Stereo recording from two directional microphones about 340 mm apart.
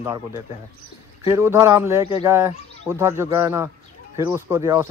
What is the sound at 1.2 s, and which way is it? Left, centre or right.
Speech, centre.